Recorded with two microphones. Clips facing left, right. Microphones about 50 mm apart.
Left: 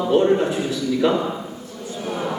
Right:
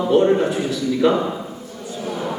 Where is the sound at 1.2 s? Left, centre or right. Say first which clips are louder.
Right 1 dB; centre.